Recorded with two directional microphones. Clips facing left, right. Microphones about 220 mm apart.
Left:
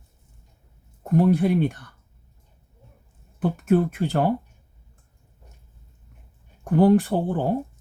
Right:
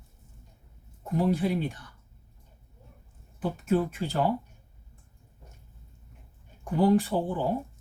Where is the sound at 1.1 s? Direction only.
60° left (ahead or behind).